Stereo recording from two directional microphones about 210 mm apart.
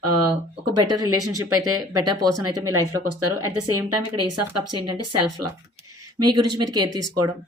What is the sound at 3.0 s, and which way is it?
Speech, 90° right.